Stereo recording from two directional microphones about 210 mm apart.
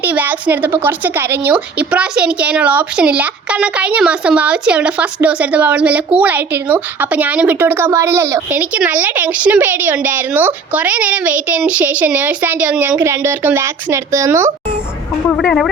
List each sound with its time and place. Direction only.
0.0 s speech: 10° right (ahead or behind)
15.3 s speech: centre (ahead or behind)